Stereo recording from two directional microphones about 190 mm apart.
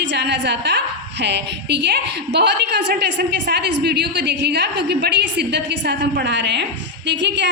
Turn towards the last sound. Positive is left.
turn(degrees=-70)  # may be behind; listen again after turning